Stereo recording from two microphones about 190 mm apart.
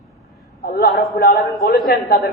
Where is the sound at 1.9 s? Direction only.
55° left (ahead or behind).